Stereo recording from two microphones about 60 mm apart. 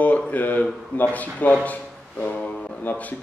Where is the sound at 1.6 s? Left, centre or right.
Left.